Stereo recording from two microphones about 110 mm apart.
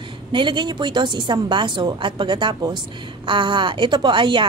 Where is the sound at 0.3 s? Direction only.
45° right (ahead or behind).